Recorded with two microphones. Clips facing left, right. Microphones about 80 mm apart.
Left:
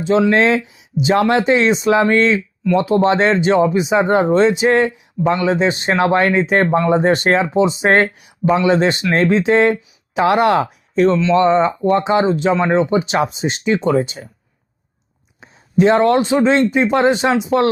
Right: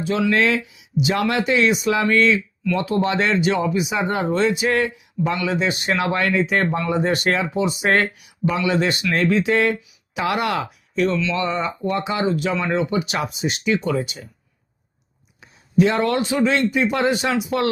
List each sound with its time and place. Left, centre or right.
0.0 s speech: left
15.4 s speech: left